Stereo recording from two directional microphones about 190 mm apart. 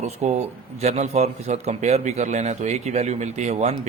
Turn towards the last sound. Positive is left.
turn(degrees=-35)  # may be behind; listen again after turning